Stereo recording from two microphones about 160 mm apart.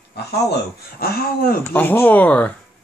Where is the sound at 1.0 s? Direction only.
70° left (ahead or behind).